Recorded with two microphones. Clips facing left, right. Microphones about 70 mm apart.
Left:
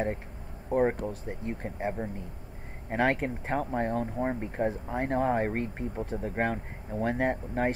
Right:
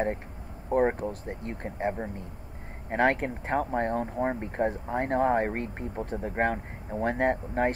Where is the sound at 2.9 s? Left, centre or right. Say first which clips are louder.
Right 2 dB; centre.